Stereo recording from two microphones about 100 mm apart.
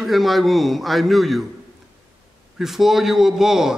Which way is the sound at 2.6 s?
5° right (ahead or behind).